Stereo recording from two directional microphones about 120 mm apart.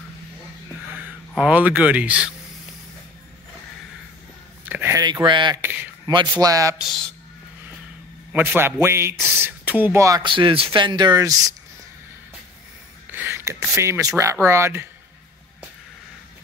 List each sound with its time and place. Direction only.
1.5 s speech: 10° right (ahead or behind)
4.6 s a sound: 15° right (ahead or behind)
4.9 s a sound: 30° right (ahead or behind)
5.2 s speech: 40° right (ahead or behind)
5.6 s speech: 15° right (ahead or behind)
6.0 s a man's voice: 30° right (ahead or behind)
6.8 s speech: centre (ahead or behind)
8.3 s speech: 15° right (ahead or behind)
10.2 s speech: 45° right (ahead or behind)
13.0 s speech: 15° right (ahead or behind)